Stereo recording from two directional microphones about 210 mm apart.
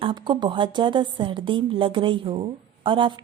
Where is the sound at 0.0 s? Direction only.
20° right (ahead or behind).